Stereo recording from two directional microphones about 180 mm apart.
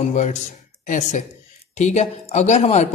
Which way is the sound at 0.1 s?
40° left (ahead or behind).